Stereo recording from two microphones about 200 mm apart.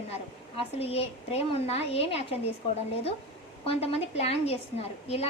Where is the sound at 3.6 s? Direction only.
30° left (ahead or behind).